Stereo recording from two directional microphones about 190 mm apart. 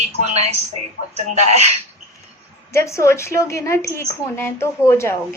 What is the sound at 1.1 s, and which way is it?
Speech, 35° right (ahead or behind).